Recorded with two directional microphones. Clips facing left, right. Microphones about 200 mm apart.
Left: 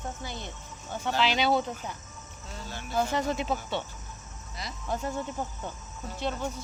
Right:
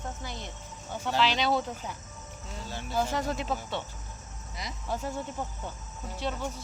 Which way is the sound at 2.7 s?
30° right (ahead or behind).